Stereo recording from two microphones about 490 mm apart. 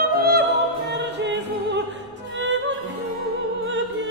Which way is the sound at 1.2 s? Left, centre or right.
Right.